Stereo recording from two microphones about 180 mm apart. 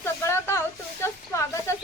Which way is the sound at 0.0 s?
15° left (ahead or behind).